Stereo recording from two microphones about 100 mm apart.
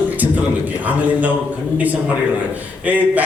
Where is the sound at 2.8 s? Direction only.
15° right (ahead or behind).